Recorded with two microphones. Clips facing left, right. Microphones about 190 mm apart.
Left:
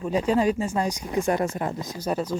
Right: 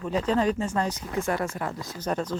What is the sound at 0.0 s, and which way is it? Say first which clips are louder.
Speech: left 2 dB; 10° left (ahead or behind).